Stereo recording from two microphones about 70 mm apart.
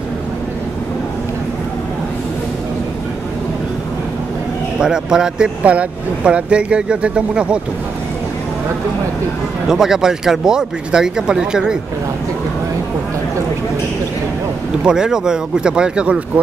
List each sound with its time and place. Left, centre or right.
4.7 s speech: centre
9.7 s speech: centre
14.8 s speech: centre